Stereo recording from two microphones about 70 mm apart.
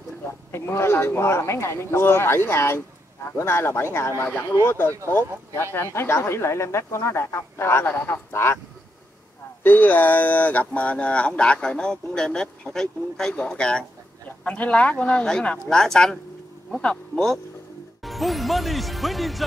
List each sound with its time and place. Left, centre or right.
0.5 s speech: left
9.6 s speech: left; by 17.4 s centre
18.0 s music: centre